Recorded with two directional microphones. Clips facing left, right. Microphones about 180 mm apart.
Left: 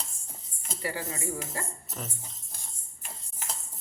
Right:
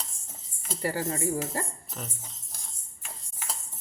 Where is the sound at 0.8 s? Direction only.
40° right (ahead or behind).